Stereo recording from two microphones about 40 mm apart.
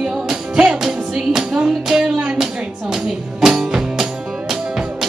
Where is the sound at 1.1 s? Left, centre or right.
Centre.